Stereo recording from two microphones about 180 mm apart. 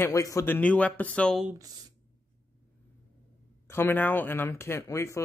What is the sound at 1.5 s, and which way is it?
Speech, 20° right (ahead or behind).